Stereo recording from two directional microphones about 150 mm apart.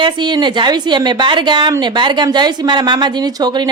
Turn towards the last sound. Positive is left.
turn(degrees=-30)  # may be behind; listen again after turning